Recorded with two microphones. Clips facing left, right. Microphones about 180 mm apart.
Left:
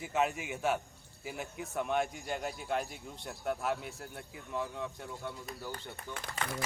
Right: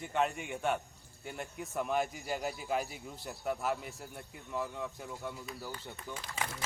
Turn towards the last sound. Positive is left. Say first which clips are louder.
# left 1 dB
turn(degrees=60)  # may be behind; listen again after turning